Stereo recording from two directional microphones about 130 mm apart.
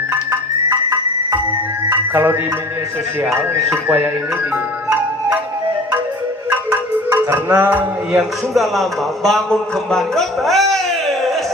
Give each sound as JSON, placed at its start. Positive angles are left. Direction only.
{"t": 0.1, "sound": "music", "side_deg": -25}
{"t": 3.7, "sound": "music", "side_deg": -10}
{"t": 7.3, "sound": "a man's voice", "side_deg": -15}